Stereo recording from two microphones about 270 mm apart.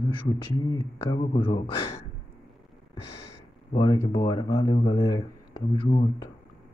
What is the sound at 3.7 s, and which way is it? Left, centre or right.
Speech, centre.